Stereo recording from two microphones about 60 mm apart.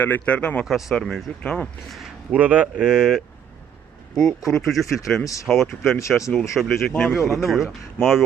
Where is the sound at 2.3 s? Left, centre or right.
Right.